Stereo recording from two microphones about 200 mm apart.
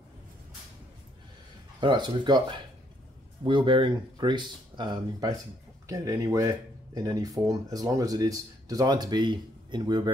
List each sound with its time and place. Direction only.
1.8 s speech: 25° right (ahead or behind)